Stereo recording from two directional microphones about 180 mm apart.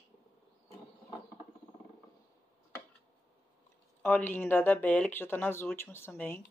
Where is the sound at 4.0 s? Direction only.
10° left (ahead or behind).